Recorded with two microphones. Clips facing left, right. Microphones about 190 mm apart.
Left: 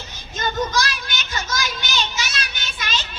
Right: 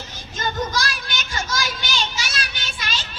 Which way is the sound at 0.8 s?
45° right (ahead or behind).